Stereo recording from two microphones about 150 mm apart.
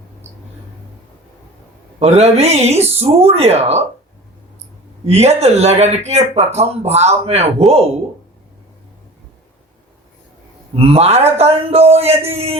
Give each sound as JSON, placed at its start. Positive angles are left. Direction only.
{"t": 2.0, "sound": "speech", "side_deg": -45}
{"t": 5.0, "sound": "speech", "side_deg": -45}
{"t": 10.8, "sound": "speech", "side_deg": -45}